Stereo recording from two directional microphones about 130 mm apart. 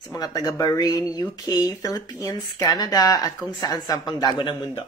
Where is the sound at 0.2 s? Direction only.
30° left (ahead or behind).